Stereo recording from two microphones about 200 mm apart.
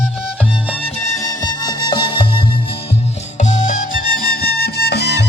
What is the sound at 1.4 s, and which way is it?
Music, 20° left (ahead or behind).